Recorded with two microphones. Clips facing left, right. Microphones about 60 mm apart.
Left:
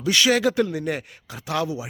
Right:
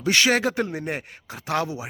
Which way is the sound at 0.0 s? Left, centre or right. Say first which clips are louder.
Left 1 dB; right.